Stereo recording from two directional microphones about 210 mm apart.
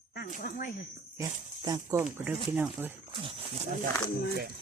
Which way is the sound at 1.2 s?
15° right (ahead or behind).